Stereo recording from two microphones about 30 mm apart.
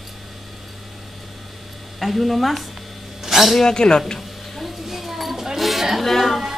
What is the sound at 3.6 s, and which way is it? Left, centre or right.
Speech, left.